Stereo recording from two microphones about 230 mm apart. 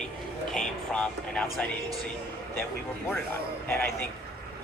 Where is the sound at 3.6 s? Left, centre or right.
Centre.